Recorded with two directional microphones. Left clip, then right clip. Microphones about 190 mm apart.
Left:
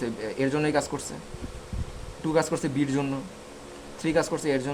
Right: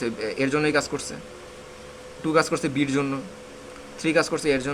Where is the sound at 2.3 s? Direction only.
20° left (ahead or behind).